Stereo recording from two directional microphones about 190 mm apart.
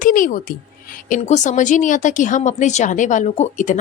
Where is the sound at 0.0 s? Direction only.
45° left (ahead or behind).